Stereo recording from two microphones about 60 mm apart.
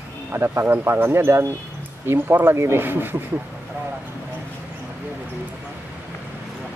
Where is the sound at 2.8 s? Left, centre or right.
Right.